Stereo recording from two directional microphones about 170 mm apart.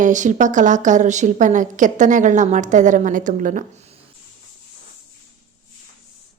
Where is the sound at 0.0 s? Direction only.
45° right (ahead or behind).